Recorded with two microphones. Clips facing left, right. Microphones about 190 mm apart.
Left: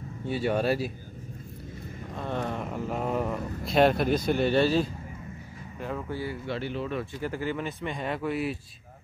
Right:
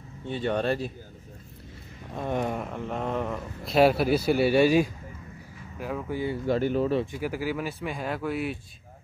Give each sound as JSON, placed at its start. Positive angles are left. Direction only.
{"t": 0.2, "sound": "speech", "side_deg": 5}
{"t": 2.2, "sound": "speech", "side_deg": -15}
{"t": 2.6, "sound": "speech", "side_deg": 5}
{"t": 6.4, "sound": "speech", "side_deg": -45}
{"t": 7.1, "sound": "speech", "side_deg": -10}